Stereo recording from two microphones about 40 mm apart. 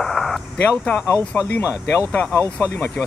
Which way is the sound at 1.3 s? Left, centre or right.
Left.